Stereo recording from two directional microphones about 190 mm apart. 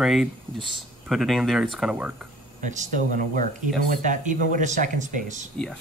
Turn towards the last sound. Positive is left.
turn(degrees=-40)  # may be behind; listen again after turning